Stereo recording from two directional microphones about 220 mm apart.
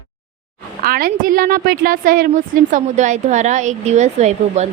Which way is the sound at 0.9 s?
40° right (ahead or behind).